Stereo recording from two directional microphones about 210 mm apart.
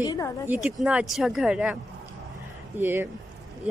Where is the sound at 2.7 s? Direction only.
10° right (ahead or behind).